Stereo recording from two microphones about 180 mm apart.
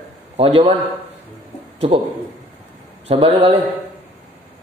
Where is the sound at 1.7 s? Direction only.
35° right (ahead or behind).